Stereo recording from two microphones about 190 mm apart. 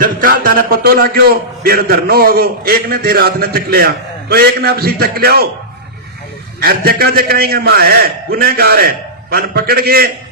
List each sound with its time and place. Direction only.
0.0 s a man's voice: 50° right (ahead or behind)
6.6 s a man's voice: 55° right (ahead or behind)